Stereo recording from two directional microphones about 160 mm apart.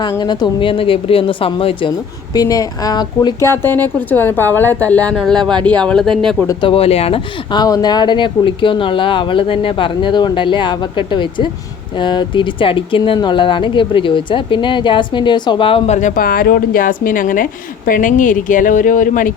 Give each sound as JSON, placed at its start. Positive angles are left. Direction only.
{"t": 0.0, "sound": "speech", "side_deg": 25}
{"t": 2.3, "sound": "speech", "side_deg": 20}
{"t": 6.5, "sound": "speech", "side_deg": 30}
{"t": 16.0, "sound": "speech", "side_deg": 55}